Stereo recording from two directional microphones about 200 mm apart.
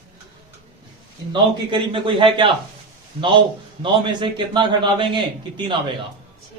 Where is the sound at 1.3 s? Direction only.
25° right (ahead or behind).